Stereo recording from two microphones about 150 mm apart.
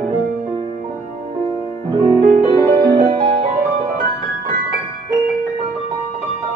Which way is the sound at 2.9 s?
50° right (ahead or behind).